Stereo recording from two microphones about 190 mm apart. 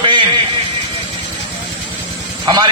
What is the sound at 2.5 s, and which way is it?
Speech, 20° right (ahead or behind).